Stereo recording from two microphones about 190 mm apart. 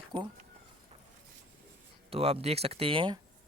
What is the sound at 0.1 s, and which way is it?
Speech, 25° right (ahead or behind).